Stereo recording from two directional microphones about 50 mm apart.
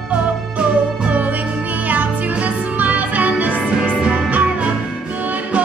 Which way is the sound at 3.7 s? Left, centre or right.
Centre.